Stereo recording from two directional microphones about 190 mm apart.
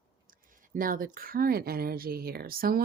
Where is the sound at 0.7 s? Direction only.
45° right (ahead or behind).